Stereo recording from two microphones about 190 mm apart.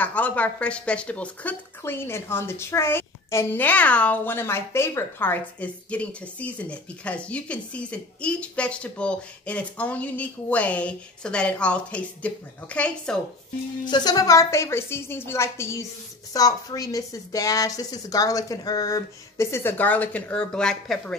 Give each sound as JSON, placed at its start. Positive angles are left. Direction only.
{"t": 0.0, "sound": "speech", "side_deg": 10}
{"t": 13.8, "sound": "speech", "side_deg": 20}